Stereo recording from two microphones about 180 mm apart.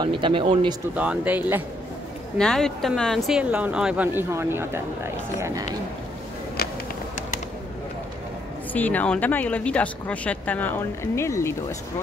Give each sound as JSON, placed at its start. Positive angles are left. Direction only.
{"t": 0.0, "sound": "speech", "side_deg": -25}
{"t": 0.9, "sound": "speech", "side_deg": -10}
{"t": 2.3, "sound": "speech", "side_deg": 5}
{"t": 8.7, "sound": "speech", "side_deg": 10}